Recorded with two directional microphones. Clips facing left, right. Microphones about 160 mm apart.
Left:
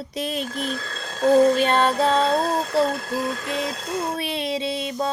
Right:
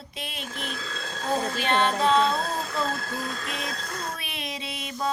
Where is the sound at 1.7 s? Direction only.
40° left (ahead or behind).